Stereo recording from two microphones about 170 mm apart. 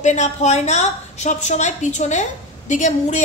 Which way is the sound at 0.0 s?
45° left (ahead or behind).